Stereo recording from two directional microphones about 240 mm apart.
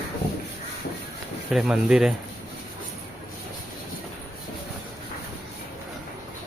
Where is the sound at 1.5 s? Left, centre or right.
Centre.